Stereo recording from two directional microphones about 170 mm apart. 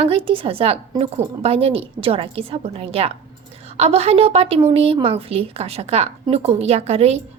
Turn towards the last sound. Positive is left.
turn(degrees=-40)  # may be behind; listen again after turning